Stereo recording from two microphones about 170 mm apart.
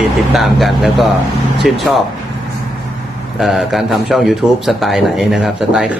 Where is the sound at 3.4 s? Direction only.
Centre (ahead or behind).